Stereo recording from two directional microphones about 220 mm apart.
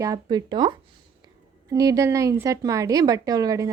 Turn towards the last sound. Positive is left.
turn(degrees=-15)  # may be behind; listen again after turning